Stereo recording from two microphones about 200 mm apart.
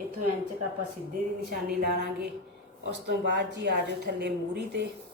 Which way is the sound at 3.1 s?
60° right (ahead or behind).